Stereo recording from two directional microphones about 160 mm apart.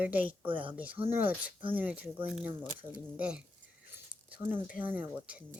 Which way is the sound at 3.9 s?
15° right (ahead or behind).